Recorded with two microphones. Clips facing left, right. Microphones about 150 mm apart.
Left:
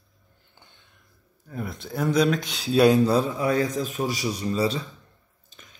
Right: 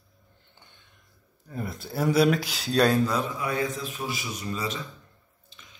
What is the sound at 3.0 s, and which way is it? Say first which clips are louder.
Speech: left 6 dB; 35° left (ahead or behind).